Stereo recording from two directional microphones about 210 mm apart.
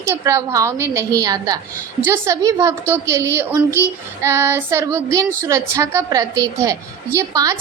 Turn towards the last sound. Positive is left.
turn(degrees=-15)  # may be behind; listen again after turning